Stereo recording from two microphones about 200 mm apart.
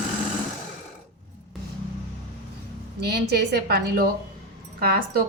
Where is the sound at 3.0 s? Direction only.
55° right (ahead or behind).